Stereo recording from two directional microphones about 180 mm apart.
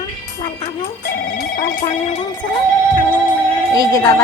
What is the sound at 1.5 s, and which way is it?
Music, 50° left (ahead or behind).